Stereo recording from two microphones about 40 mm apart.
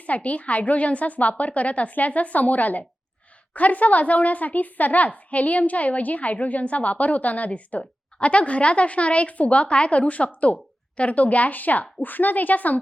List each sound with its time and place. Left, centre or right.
0.0 s a woman's voice: left